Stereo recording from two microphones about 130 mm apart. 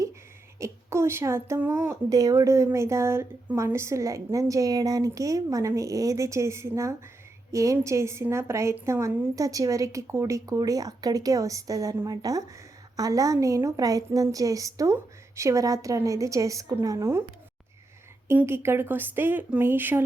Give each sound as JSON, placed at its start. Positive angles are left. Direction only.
{"t": 0.6, "sound": "speech", "side_deg": -20}
{"t": 2.0, "sound": "speech", "side_deg": -30}
{"t": 18.3, "sound": "speech", "side_deg": -20}